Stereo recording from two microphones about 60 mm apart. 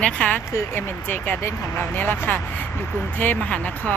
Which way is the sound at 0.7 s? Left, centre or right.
Left.